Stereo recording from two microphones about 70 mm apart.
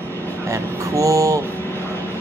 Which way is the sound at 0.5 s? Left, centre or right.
Right.